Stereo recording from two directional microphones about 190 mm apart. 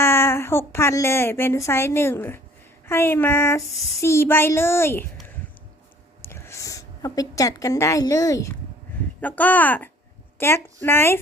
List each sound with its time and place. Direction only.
0.0 s a woman's voice: 15° left (ahead or behind)
6.2 s a woman's voice: 15° left (ahead or behind)